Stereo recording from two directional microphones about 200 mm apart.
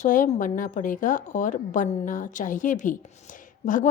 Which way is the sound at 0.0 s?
40° left (ahead or behind).